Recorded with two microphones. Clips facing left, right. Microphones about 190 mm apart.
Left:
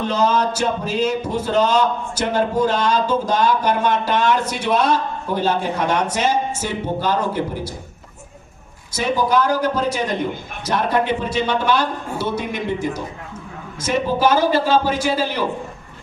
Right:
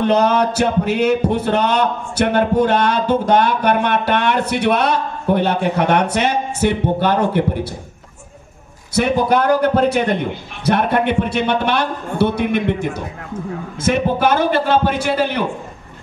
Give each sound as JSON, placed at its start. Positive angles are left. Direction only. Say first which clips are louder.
{"t": 0.0, "sound": "speech", "louder": "right 4 dB", "side_deg": -65}
{"t": 8.9, "sound": "speech", "louder": "right 3 dB", "side_deg": -60}